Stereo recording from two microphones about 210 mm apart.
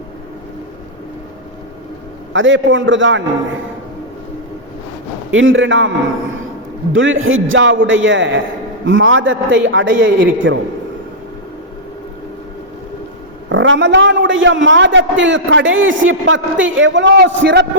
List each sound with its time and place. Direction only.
2.3 s a man's voice: 65° right (ahead or behind)
5.3 s a man's voice: 70° right (ahead or behind)
6.9 s a man's voice: 65° right (ahead or behind)
13.5 s a man's voice: 65° right (ahead or behind)